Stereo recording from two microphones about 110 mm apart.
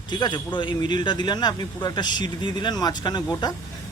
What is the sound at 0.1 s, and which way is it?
A man's voice, 45° left (ahead or behind).